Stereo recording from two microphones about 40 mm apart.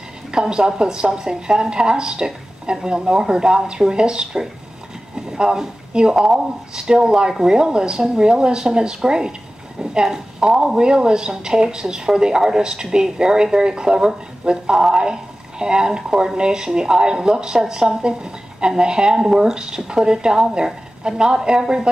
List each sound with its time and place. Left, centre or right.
0.3 s speech: centre